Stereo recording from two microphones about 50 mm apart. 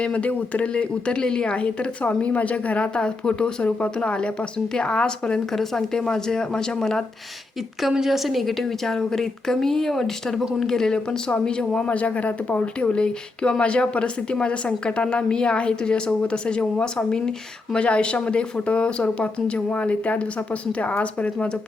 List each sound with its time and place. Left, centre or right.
0.0 s a woman's voice: left
7.8 s a woman's voice: centre
11.9 s speech: left